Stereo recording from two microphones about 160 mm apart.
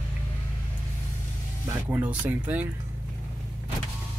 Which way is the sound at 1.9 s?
10° right (ahead or behind).